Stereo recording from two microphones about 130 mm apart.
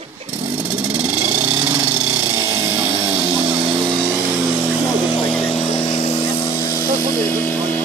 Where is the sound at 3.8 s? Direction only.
30° right (ahead or behind).